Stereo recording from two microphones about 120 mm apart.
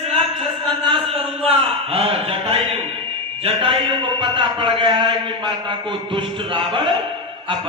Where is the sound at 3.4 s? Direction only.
50° right (ahead or behind).